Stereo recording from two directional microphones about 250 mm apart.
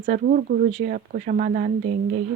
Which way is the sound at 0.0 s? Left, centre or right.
Right.